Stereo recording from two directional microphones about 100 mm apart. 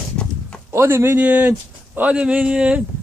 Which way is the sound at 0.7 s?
25° right (ahead or behind).